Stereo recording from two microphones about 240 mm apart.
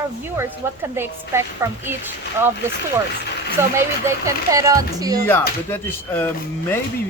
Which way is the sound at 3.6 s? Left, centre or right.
Centre.